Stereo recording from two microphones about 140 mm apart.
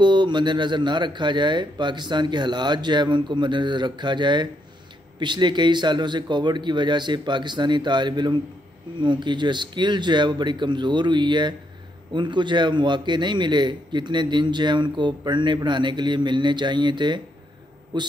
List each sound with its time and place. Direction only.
0.0 s a man's voice: 35° right (ahead or behind)